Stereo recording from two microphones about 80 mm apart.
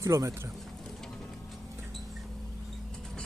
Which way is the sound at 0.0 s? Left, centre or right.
Right.